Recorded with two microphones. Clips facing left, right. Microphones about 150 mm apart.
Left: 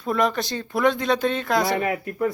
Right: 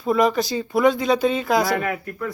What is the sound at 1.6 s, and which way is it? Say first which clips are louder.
Speech: even; 25° left (ahead or behind).